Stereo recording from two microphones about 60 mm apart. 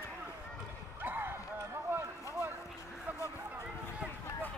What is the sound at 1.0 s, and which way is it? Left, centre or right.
Basketball bounce, right.